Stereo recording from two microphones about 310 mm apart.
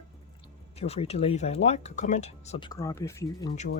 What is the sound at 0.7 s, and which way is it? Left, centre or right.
Speech, centre.